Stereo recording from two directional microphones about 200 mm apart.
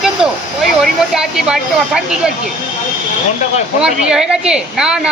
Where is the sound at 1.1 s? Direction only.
5° right (ahead or behind).